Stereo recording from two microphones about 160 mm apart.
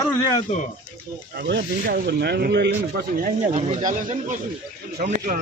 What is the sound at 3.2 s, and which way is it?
Speech, 45° right (ahead or behind).